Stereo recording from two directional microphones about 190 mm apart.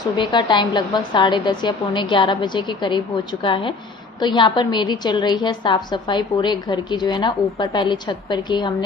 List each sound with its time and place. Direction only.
0.0 s a woman's voice: 25° left (ahead or behind)